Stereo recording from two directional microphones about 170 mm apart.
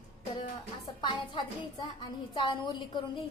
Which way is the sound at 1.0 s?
25° left (ahead or behind).